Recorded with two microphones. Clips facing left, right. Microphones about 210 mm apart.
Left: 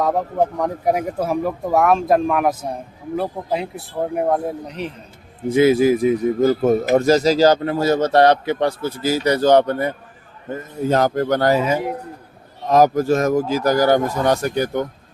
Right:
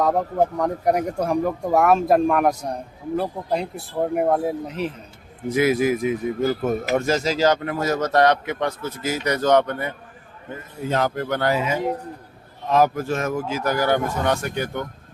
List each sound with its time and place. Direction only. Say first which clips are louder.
0.0 s a man's voice: left 1 dB; centre (ahead or behind)
5.5 s speech: left 5 dB; 25° left (ahead or behind)